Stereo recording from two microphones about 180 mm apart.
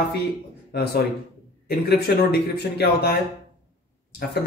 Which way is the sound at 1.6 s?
65° left (ahead or behind).